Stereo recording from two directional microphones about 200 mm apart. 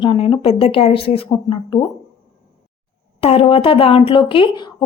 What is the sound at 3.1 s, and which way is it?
A woman's voice, 30° left (ahead or behind).